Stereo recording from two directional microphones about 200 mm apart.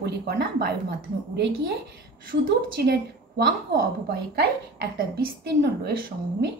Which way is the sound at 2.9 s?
55° right (ahead or behind).